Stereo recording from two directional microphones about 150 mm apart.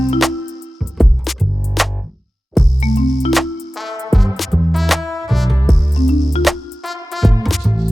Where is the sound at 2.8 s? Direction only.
45° left (ahead or behind).